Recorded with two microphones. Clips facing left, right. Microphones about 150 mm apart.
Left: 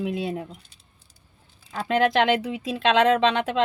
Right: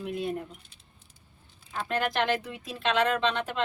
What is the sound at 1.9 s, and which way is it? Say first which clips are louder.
Speech: left 8 dB; 90° left.